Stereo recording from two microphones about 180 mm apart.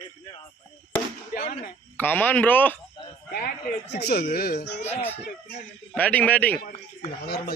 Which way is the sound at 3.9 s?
65° left (ahead or behind).